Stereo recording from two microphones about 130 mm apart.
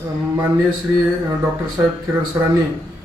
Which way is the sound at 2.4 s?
25° right (ahead or behind).